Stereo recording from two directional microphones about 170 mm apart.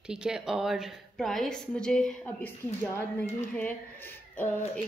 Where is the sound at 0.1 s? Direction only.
5° right (ahead or behind).